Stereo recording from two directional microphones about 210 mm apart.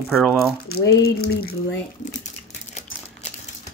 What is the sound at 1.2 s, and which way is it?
Speech, 45° left (ahead or behind).